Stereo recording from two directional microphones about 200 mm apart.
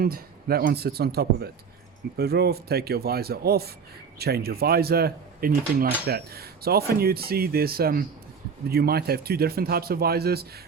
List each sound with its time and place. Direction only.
0.0 s speech: 50° right (ahead or behind)